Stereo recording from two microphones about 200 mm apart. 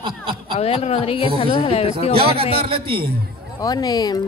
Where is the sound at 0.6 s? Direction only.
30° left (ahead or behind).